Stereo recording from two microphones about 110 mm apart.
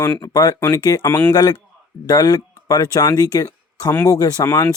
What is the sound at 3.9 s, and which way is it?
Speech, 20° left (ahead or behind).